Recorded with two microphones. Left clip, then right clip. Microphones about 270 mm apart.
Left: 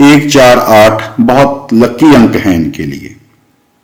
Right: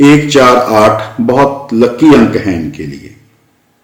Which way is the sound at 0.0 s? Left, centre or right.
Left.